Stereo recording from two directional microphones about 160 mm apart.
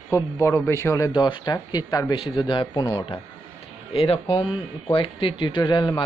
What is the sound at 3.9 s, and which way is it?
Speech, 35° left (ahead or behind).